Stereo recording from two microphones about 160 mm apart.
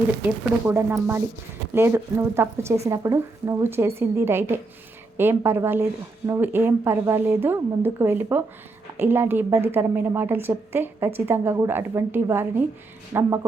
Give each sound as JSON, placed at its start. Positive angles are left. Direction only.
{"t": 0.7, "sound": "a woman's voice", "side_deg": -15}